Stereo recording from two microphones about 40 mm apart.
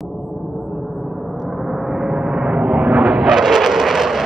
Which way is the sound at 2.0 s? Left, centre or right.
Right.